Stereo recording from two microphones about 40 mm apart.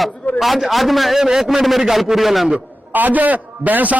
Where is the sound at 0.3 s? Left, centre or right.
Centre.